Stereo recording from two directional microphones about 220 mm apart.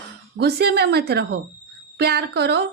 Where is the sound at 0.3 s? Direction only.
50° right (ahead or behind).